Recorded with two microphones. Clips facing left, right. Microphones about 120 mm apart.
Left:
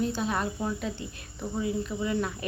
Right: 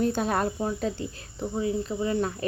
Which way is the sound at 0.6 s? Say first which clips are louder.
Right 3 dB; 35° right (ahead or behind).